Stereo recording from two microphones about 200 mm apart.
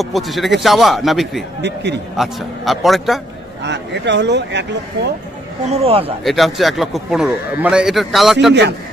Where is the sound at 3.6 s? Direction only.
60° right (ahead or behind).